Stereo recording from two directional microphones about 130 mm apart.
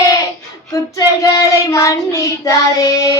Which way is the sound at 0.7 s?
25° left (ahead or behind).